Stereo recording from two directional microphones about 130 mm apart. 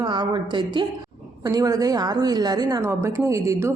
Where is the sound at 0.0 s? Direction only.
35° right (ahead or behind).